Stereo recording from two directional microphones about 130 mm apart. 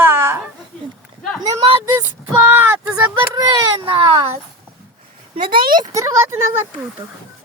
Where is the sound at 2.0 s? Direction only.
15° right (ahead or behind).